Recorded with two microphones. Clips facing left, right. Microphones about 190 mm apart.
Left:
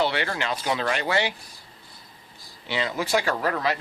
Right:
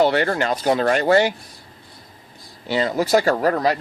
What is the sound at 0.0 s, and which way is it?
Speech, 45° right (ahead or behind).